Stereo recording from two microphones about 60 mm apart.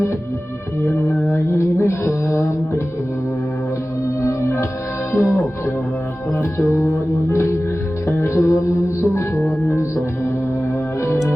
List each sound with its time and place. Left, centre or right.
0.9 s music: left
4.2 s music: left
5.1 s music: left
8.0 s music: left